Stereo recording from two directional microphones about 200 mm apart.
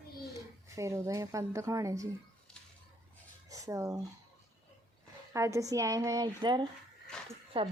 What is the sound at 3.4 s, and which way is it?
Speech, 15° right (ahead or behind).